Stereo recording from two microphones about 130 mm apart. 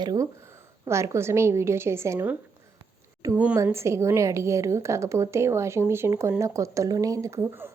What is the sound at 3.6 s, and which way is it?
A woman's voice, 20° right (ahead or behind).